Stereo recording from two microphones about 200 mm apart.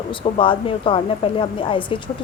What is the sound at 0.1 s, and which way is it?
Speech, 25° left (ahead or behind).